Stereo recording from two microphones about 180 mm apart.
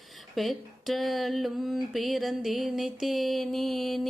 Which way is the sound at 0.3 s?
Centre (ahead or behind).